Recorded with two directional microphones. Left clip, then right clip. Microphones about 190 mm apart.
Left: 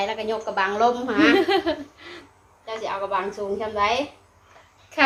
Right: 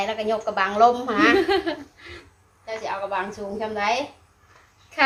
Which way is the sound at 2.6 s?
15° right (ahead or behind).